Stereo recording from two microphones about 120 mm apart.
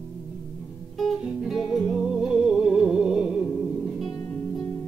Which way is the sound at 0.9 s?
Centre (ahead or behind).